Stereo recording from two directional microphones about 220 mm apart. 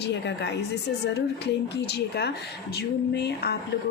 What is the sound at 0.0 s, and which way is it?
A woman's voice, 50° left (ahead or behind).